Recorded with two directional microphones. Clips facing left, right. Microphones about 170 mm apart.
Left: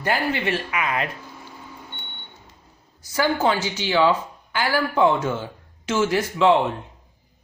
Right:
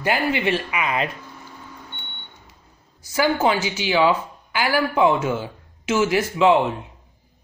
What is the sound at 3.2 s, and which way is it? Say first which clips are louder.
Speech: right 1 dB; 10° right (ahead or behind).